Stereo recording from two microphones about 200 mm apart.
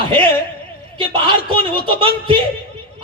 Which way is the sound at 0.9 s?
25° right (ahead or behind).